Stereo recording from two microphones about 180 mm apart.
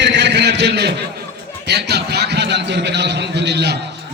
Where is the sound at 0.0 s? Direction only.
75° right (ahead or behind).